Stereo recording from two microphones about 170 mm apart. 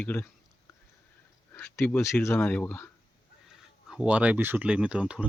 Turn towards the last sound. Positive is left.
turn(degrees=-5)  # may be behind; listen again after turning